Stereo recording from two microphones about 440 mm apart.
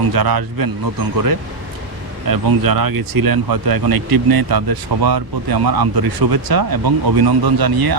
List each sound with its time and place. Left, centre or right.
0.1 s speech: right
2.2 s speech: right